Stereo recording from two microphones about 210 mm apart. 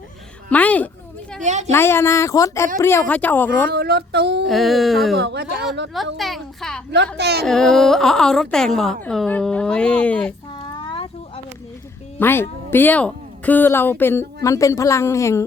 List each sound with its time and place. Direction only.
0.5 s a sound: 5° left (ahead or behind)
1.4 s a sound: 35° right (ahead or behind)
1.7 s speech: 10° left (ahead or behind)
3.7 s speech: 50° right (ahead or behind)
4.4 s a woman's voice: centre (ahead or behind)
5.1 s speech: 50° right (ahead or behind)
6.1 s a woman's voice: centre (ahead or behind)
7.2 s speech: 50° right (ahead or behind)
7.4 s a woman's voice: centre (ahead or behind)
10.8 s a sound: 25° left (ahead or behind)
12.2 s speech: 10° left (ahead or behind)